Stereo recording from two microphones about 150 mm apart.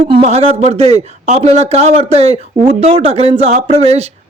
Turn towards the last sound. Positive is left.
turn(degrees=-45)  # may be behind; listen again after turning